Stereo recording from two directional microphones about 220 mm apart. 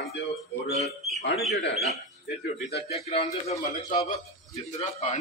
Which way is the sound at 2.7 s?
30° left (ahead or behind).